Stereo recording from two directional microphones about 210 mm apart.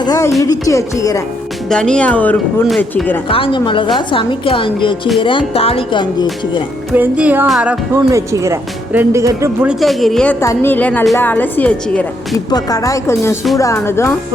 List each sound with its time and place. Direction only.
0.0 s music: 15° left (ahead or behind)
0.4 s a woman's voice: 15° left (ahead or behind)
1.7 s speech: 5° left (ahead or behind)
3.2 s a woman's voice: 25° left (ahead or behind)
6.9 s speech: 10° right (ahead or behind)
10.4 s a woman's voice: 15° left (ahead or behind)
12.5 s a woman's voice: 20° left (ahead or behind)